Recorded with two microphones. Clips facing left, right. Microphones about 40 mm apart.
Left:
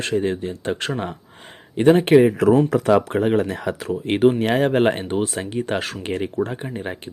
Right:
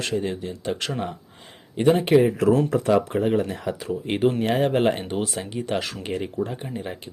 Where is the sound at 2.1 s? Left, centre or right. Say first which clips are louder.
Left 4 dB; left.